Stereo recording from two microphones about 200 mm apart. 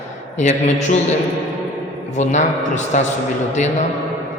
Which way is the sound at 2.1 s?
35° left (ahead or behind).